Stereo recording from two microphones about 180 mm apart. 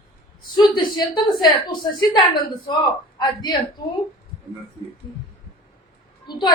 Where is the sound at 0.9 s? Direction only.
25° left (ahead or behind).